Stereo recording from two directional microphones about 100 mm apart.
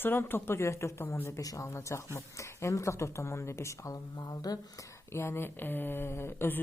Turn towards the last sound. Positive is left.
turn(degrees=20)  # may be behind; listen again after turning